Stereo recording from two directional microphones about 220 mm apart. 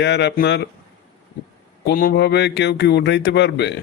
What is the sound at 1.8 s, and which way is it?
Speech, 45° left (ahead or behind).